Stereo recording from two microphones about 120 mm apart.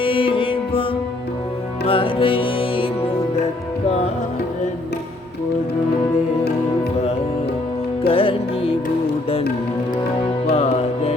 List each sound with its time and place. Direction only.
0.0 s music: 45° left (ahead or behind)
1.9 s music: 45° left (ahead or behind)
3.8 s music: 65° left (ahead or behind)
8.0 s music: 50° left (ahead or behind)
10.5 s music: 65° left (ahead or behind)